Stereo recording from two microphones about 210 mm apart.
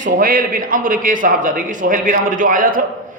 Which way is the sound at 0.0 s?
40° right (ahead or behind).